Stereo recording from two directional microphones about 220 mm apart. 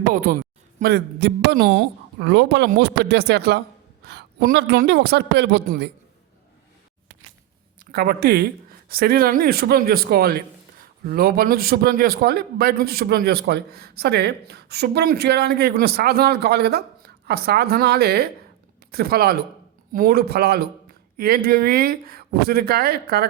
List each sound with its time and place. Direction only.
0.1 s a man's voice: 40° right (ahead or behind)
7.9 s a man's voice: 45° right (ahead or behind)